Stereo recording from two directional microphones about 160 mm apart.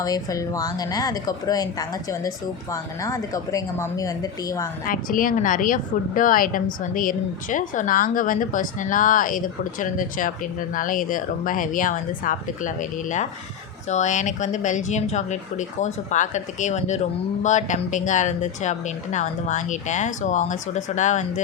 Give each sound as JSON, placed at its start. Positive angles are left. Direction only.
{"t": 0.0, "sound": "a woman's voice", "side_deg": 20}
{"t": 4.9, "sound": "a woman's voice", "side_deg": 60}